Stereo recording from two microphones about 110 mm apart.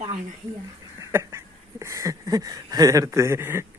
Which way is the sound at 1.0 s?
25° right (ahead or behind).